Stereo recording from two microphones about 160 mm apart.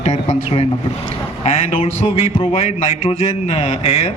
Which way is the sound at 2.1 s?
40° left (ahead or behind).